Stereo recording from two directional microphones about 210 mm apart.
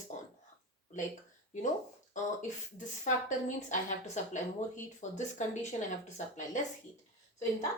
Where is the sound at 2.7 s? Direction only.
35° left (ahead or behind).